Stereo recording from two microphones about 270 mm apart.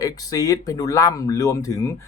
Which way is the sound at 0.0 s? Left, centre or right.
Centre.